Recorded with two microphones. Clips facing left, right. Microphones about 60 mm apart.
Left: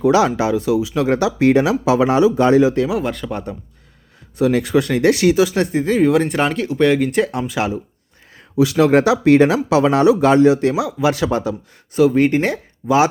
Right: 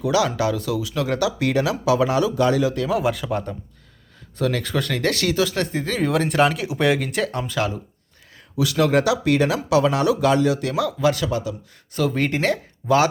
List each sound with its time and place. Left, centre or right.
0.0 s speech: left
3.0 s speech: centre
4.4 s speech: centre
8.5 s speech: left
11.9 s speech: centre